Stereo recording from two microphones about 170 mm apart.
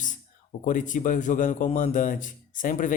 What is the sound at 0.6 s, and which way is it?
A man's voice, 50° left (ahead or behind).